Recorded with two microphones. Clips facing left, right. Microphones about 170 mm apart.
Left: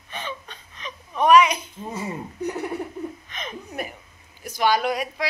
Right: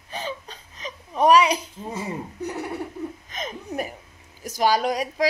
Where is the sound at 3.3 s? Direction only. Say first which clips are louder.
Right 3 dB; 40° right (ahead or behind).